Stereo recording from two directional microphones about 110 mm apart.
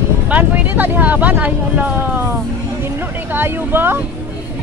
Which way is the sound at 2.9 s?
20° right (ahead or behind).